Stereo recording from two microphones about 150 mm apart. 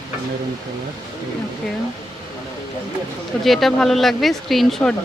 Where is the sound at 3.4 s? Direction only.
Centre (ahead or behind).